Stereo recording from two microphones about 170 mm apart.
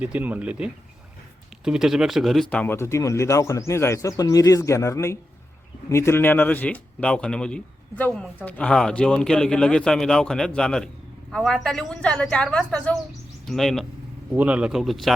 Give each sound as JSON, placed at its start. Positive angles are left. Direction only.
{"t": 0.0, "sound": "speech", "side_deg": -10}